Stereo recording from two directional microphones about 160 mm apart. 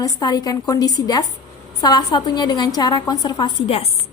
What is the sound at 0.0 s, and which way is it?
A woman's voice, 25° left (ahead or behind).